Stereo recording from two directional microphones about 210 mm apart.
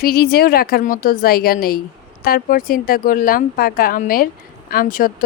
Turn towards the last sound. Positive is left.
turn(degrees=40)  # may be behind; listen again after turning